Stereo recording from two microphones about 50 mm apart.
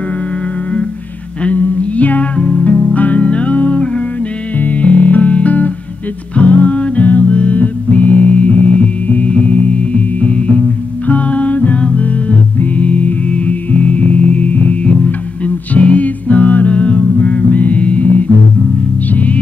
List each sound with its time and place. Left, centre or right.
1.4 s music: left